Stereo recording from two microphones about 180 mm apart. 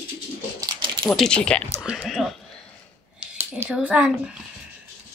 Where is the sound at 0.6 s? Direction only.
25° right (ahead or behind).